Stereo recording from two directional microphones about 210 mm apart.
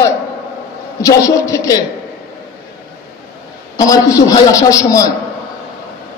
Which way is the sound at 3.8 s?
15° left (ahead or behind).